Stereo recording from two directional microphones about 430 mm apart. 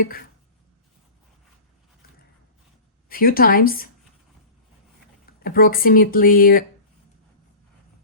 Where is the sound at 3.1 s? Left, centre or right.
Centre.